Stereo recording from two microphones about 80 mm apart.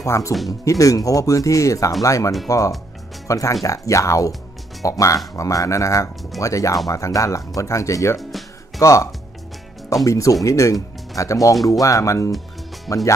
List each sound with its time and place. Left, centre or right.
0.0 s speech: left
8.2 s music: centre
8.7 s speech: left